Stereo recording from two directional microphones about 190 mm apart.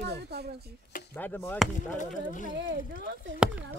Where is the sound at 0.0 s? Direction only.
60° right (ahead or behind).